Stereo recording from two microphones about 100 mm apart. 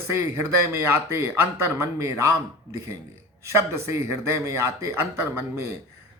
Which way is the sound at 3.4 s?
30° right (ahead or behind).